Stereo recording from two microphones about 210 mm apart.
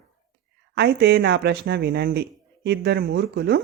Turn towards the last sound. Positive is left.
turn(degrees=-50)  # may be behind; listen again after turning